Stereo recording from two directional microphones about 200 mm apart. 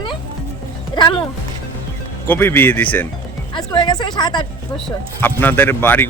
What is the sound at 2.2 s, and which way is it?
Speech, 10° left (ahead or behind).